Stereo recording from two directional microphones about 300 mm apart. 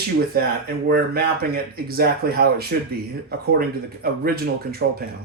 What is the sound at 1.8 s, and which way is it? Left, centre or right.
Speech, right.